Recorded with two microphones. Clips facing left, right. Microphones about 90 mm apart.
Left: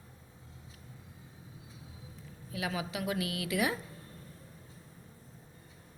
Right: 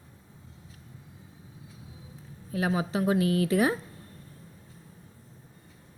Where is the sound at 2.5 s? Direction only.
35° right (ahead or behind).